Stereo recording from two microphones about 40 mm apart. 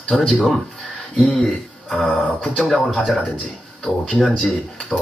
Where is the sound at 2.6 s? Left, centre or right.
Centre.